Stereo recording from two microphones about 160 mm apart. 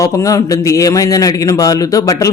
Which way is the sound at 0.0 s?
20° left (ahead or behind).